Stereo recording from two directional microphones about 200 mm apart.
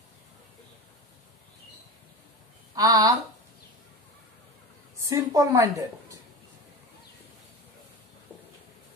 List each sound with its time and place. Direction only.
2.7 s speech: 20° right (ahead or behind)
5.0 s a woman's voice: 15° right (ahead or behind)